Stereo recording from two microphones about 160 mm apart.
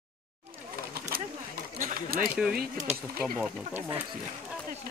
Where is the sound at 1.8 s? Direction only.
55° right (ahead or behind).